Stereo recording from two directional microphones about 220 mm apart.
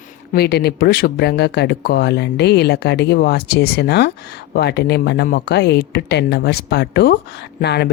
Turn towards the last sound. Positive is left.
turn(degrees=50)  # may be behind; listen again after turning